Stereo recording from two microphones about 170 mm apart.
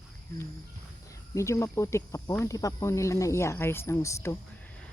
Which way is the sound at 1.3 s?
15° left (ahead or behind).